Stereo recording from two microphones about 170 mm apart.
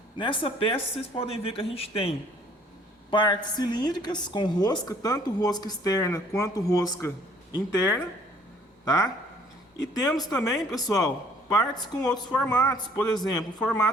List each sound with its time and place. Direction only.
0.2 s a woman's voice: 30° left (ahead or behind)
12.1 s speech: 5° left (ahead or behind)
12.5 s a woman's voice: 25° left (ahead or behind)
13.6 s a woman's voice: 5° left (ahead or behind)